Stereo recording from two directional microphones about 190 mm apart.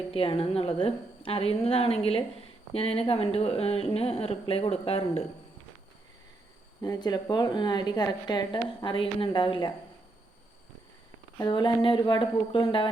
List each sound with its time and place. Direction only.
0.1 s a woman's voice: 30° left (ahead or behind)
6.8 s speech: 20° left (ahead or behind)
11.3 s speech: 25° left (ahead or behind)